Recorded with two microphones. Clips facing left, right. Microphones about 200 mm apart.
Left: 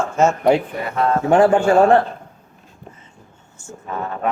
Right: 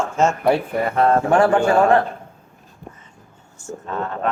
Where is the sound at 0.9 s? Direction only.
50° right (ahead or behind).